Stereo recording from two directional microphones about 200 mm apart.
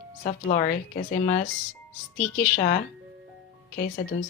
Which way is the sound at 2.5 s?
40° left (ahead or behind).